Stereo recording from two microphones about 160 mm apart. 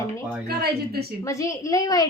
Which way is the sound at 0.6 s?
80° right.